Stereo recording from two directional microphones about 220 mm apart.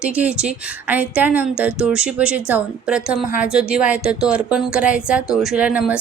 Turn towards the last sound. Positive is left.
turn(degrees=-5)  # may be behind; listen again after turning